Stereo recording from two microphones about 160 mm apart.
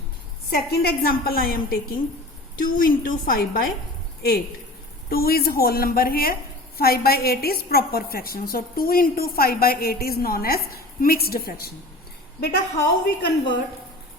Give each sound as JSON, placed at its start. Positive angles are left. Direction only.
{"t": 0.5, "sound": "a woman's voice", "side_deg": 75}
{"t": 5.0, "sound": "a woman's voice", "side_deg": 70}
{"t": 12.4, "sound": "a woman's voice", "side_deg": 85}